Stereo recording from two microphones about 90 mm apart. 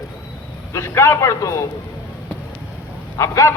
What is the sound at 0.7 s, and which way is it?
Speech, 30° left (ahead or behind).